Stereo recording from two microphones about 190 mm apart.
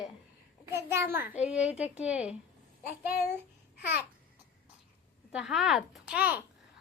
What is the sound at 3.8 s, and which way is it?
Speech, 10° right (ahead or behind).